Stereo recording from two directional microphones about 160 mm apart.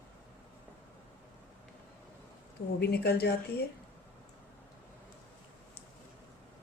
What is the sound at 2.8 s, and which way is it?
Speech, 85° left.